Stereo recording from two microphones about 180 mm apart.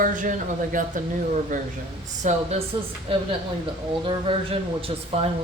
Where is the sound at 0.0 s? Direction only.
45° right (ahead or behind).